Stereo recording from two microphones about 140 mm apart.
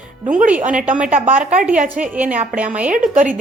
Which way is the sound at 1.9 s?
10° right (ahead or behind).